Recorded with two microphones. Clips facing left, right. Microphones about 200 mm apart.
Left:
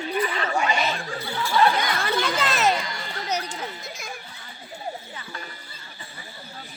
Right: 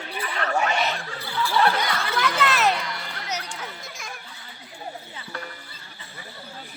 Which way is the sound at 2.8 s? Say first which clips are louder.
Even; 60° right (ahead or behind).